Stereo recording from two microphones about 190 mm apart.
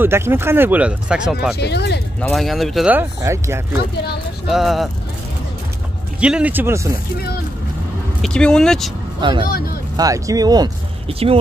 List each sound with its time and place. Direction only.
0.0 s speech: 10° right (ahead or behind)
1.6 s speech: 60° left (ahead or behind)
2.1 s speech: 5° left (ahead or behind); by 3.6 s 15° right (ahead or behind)
4.5 s speech: centre (ahead or behind)
6.2 s speech: 5° right (ahead or behind)
8.2 s speech: 5° left (ahead or behind)
9.9 s speech: 15° right (ahead or behind)